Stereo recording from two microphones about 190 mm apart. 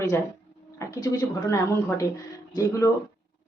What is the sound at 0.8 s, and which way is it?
Speech, 20° left (ahead or behind).